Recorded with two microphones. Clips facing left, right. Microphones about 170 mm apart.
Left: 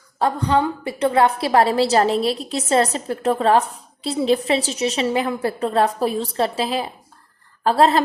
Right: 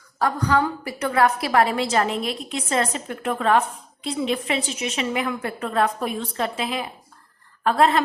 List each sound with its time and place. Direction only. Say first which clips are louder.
0.2 s a woman's voice: left 2 dB; 25° left (ahead or behind)